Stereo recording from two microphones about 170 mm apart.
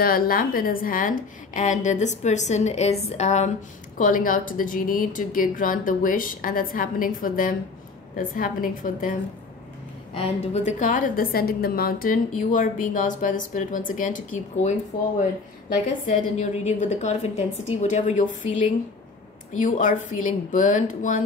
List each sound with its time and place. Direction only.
0.0 s a woman's voice: 60° left (ahead or behind); by 3.5 s 40° left (ahead or behind)
4.0 s a woman's voice: 55° left (ahead or behind)
10.1 s a woman's voice: 40° left (ahead or behind)
16.1 s a woman's voice: 45° left (ahead or behind)
19.6 s a woman's voice: 50° left (ahead or behind)